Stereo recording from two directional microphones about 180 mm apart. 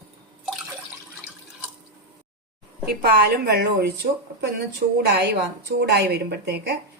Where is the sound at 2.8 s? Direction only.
60° right (ahead or behind).